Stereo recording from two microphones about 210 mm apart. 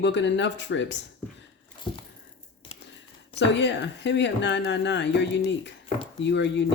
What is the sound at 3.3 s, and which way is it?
Speech, 55° left (ahead or behind).